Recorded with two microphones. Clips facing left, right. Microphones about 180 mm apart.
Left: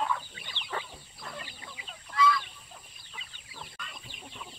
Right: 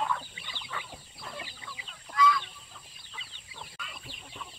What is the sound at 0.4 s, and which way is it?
Chicken, 45° left (ahead or behind).